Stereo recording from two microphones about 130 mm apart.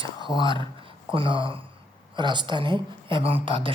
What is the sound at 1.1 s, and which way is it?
A woman's voice, 40° right (ahead or behind).